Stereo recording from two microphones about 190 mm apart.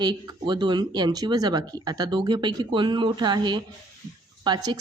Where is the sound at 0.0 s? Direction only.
20° right (ahead or behind).